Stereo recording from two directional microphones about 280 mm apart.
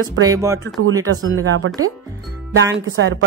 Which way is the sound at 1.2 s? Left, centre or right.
Right.